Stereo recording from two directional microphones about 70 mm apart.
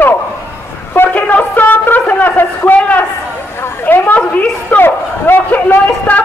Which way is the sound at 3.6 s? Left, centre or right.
Left.